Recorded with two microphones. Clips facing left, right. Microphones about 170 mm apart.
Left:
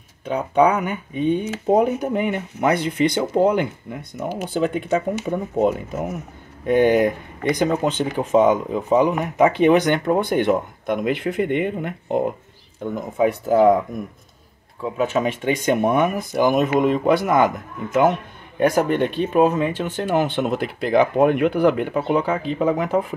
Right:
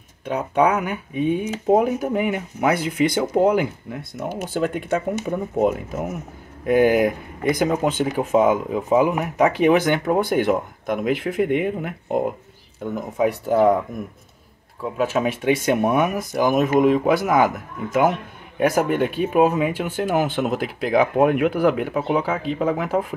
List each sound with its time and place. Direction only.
0.2 s speech: 5° right (ahead or behind)
14.8 s speech: centre (ahead or behind)
18.6 s speech: 5° right (ahead or behind)